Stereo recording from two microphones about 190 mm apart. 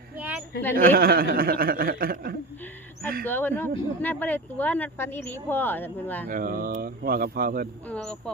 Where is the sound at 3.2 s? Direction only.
10° left (ahead or behind).